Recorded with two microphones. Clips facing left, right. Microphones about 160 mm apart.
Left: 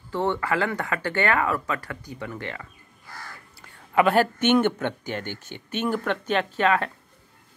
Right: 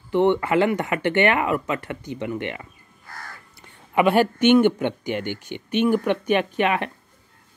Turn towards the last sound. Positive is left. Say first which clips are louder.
# right 1 dB
turn(degrees=-15)  # may be behind; listen again after turning